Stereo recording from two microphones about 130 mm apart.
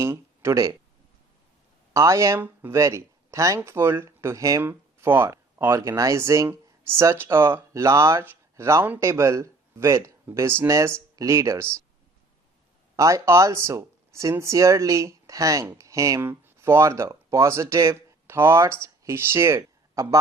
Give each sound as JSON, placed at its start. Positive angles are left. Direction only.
{"t": 0.0, "sound": "speech", "side_deg": -20}
{"t": 1.9, "sound": "speech", "side_deg": -20}
{"t": 13.0, "sound": "speech", "side_deg": -25}